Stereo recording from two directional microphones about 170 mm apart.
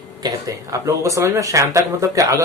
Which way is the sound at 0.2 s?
20° right (ahead or behind).